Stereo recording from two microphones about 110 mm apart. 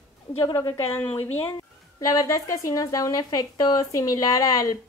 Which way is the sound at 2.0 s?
30° left (ahead or behind).